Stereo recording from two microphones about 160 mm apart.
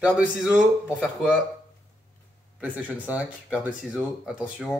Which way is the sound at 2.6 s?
10° right (ahead or behind).